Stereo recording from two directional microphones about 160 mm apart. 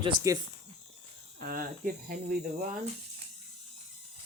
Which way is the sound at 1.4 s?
60° right (ahead or behind).